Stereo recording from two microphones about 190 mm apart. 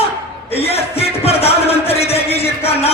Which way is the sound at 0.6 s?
30° left (ahead or behind).